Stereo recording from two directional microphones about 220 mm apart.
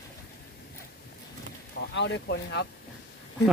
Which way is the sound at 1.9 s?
55° left (ahead or behind).